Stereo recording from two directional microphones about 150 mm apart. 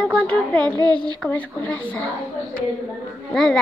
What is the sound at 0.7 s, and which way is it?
Speech, 30° right (ahead or behind).